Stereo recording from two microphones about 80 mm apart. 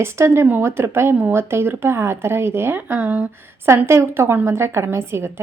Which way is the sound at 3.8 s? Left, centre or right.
Right.